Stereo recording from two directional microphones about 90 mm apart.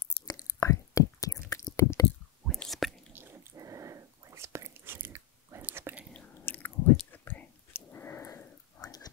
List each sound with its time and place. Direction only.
0.3 s whispering: 40° left (ahead or behind)
1.5 s a sound: 40° left (ahead or behind)
2.4 s whispering: 5° left (ahead or behind)
3.1 s dog: 25° right (ahead or behind)
3.5 s biting: 40° right (ahead or behind); by 5.9 s 20° right (ahead or behind)
6.1 s chewing: 20° left (ahead or behind)
7.1 s whispering: 20° left (ahead or behind)
8.8 s pig: 45° left (ahead or behind)